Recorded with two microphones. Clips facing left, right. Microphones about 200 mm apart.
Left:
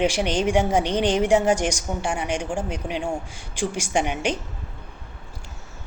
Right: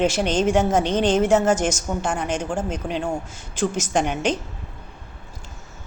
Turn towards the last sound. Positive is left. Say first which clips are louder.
# right 2 dB
turn(degrees=10)  # may be behind; listen again after turning